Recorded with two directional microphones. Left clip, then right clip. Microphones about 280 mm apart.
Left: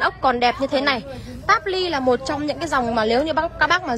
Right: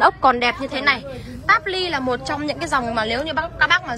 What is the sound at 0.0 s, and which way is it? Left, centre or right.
A woman's voice, centre.